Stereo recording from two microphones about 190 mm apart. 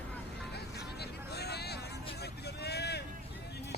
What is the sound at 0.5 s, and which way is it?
Music, 60° left (ahead or behind).